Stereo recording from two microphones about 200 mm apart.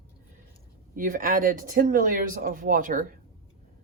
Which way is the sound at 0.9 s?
40° right (ahead or behind).